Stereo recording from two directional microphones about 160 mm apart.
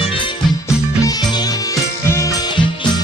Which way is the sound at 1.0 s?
25° left (ahead or behind).